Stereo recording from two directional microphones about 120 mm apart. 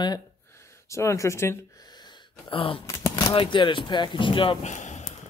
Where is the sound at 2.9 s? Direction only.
30° left (ahead or behind).